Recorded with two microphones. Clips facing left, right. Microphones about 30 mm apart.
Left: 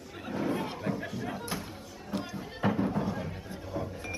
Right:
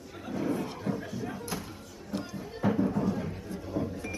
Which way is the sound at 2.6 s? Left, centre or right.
Left.